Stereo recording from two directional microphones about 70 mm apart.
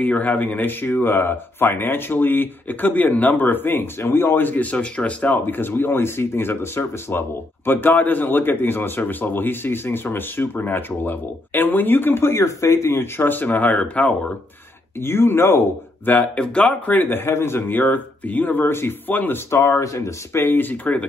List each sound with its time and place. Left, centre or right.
0.0 s speech: left
15.0 s speech: left
16.1 s speech: centre
19.8 s speech: left